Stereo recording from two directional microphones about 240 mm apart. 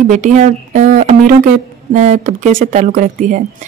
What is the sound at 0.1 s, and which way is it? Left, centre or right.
Speech, right.